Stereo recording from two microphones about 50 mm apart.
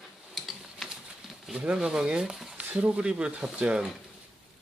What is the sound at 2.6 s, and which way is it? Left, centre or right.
Speech, right.